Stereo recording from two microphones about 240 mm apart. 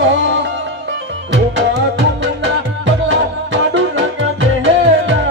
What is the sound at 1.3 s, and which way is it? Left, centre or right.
Music, right.